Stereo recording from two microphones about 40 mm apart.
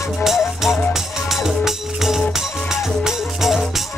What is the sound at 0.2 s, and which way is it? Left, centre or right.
Music, centre.